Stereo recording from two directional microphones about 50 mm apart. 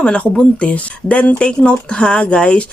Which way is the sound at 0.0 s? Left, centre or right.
Left.